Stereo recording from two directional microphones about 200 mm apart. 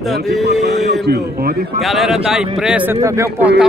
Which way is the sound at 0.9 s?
50° right (ahead or behind).